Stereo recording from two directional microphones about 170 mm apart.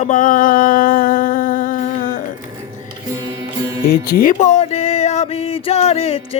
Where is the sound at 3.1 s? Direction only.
20° right (ahead or behind).